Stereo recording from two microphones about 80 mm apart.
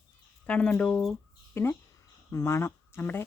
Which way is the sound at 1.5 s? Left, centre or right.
Left.